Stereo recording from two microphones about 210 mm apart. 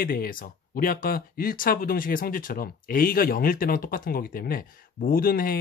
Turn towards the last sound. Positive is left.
turn(degrees=45)  # may be behind; listen again after turning